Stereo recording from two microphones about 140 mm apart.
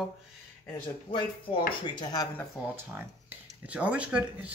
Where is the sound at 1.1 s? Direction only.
35° left (ahead or behind).